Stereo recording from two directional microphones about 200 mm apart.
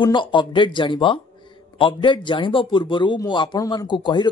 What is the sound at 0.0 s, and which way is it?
Speech, 25° left (ahead or behind).